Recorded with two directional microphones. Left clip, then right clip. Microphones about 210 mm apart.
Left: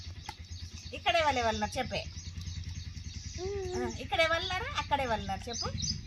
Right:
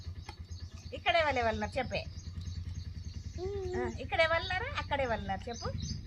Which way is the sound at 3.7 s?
40° left (ahead or behind).